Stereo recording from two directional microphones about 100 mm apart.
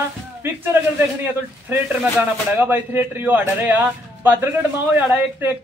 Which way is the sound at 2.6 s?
20° right (ahead or behind).